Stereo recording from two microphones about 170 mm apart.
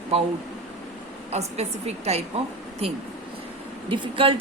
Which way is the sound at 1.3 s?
40° right (ahead or behind).